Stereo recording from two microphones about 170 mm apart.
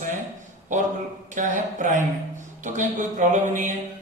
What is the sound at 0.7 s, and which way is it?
A man's voice, 45° right (ahead or behind).